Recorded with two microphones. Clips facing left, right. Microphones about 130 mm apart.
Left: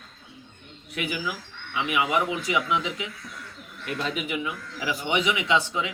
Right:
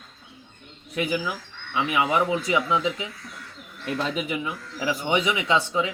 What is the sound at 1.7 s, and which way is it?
A man's voice, 30° right (ahead or behind).